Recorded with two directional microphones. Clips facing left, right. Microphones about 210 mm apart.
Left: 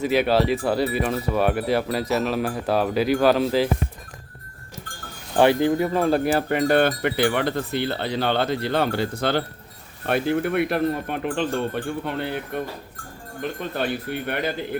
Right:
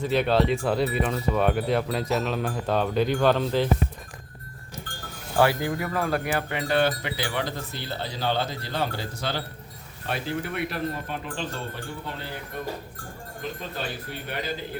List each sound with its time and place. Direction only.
0.0 s speech: 5° left (ahead or behind)
5.4 s speech: 25° left (ahead or behind)
6.5 s wind chime: 50° left (ahead or behind)